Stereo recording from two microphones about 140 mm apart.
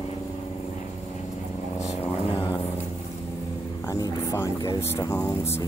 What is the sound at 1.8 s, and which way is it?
Vehicle, 50° left (ahead or behind).